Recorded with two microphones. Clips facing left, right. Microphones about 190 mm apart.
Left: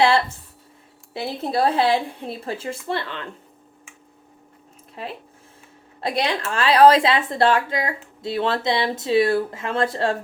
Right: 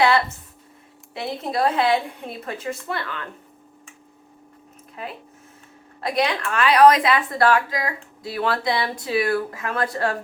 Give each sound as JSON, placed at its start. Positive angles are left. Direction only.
{"t": 0.0, "sound": "a sound", "side_deg": 30}
{"t": 1.1, "sound": "a woman's voice", "side_deg": 30}
{"t": 5.0, "sound": "a woman's voice", "side_deg": 30}